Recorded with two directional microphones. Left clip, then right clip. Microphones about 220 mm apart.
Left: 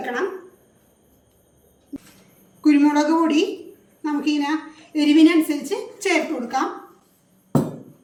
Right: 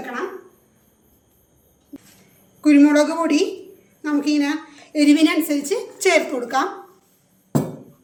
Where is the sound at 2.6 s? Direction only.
50° right (ahead or behind).